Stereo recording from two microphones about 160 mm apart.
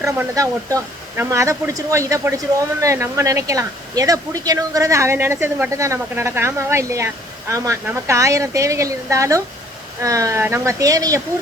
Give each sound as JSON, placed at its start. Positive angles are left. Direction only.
{"t": 0.0, "sound": "speech", "side_deg": -20}